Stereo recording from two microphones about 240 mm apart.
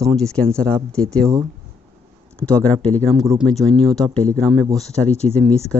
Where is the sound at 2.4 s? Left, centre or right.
Centre.